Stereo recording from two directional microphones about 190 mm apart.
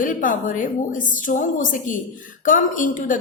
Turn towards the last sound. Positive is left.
turn(degrees=45)  # may be behind; listen again after turning